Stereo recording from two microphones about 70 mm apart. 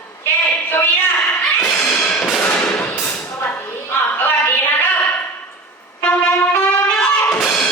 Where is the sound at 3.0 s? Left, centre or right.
Left.